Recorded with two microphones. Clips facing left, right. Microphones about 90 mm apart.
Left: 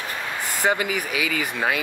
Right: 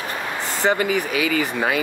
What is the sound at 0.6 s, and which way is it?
Speech, 10° left (ahead or behind).